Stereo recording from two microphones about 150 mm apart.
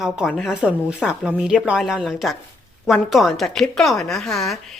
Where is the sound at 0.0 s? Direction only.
Centre (ahead or behind).